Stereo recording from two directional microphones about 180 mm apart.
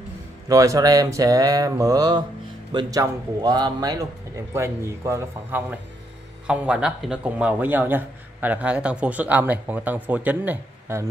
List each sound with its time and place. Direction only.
0.5 s a man's voice: 20° right (ahead or behind)